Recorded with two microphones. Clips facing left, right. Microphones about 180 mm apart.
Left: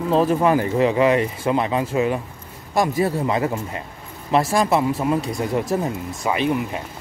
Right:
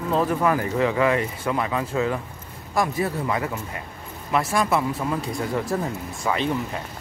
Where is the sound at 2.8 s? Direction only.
30° left (ahead or behind).